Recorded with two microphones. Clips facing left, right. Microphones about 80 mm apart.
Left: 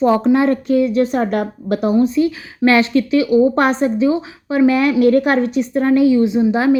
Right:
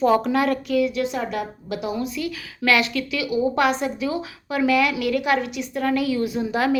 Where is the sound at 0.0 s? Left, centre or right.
Left.